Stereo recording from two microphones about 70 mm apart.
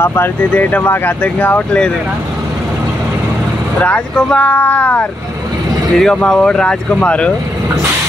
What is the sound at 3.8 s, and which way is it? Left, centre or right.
Speech, centre.